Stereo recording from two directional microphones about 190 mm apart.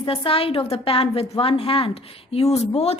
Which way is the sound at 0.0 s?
30° left (ahead or behind).